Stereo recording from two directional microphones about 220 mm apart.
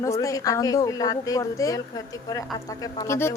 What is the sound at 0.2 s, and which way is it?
A woman's voice, 15° left (ahead or behind).